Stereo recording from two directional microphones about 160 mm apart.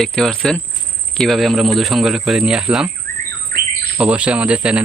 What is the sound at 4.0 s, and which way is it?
Speech, 10° right (ahead or behind).